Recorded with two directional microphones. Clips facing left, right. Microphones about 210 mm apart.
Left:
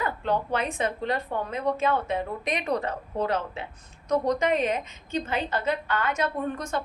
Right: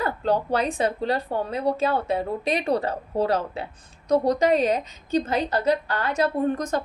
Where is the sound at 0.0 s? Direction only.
35° right (ahead or behind).